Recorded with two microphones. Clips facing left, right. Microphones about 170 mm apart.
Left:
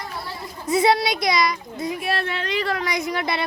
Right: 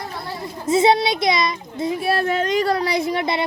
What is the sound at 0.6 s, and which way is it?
A child's voice, 25° right (ahead or behind).